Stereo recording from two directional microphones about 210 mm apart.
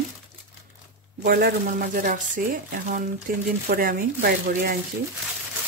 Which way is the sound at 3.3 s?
45° right (ahead or behind).